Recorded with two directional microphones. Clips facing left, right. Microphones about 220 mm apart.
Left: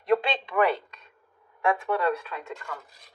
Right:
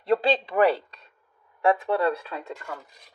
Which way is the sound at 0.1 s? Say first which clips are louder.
Right 2 dB; 35° right (ahead or behind).